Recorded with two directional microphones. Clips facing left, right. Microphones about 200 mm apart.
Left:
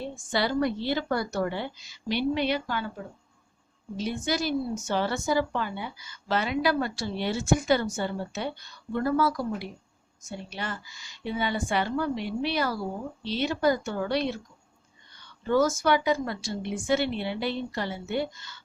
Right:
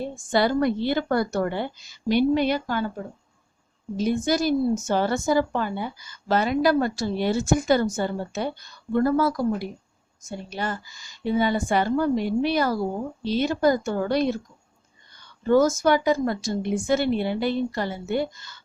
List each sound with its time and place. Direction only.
0.0 s speech: 50° right (ahead or behind)
3.9 s speech: 45° right (ahead or behind)